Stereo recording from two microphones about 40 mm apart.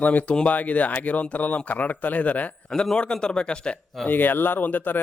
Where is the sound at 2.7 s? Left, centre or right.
Centre.